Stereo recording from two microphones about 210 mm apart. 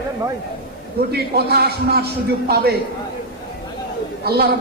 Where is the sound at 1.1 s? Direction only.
50° right (ahead or behind).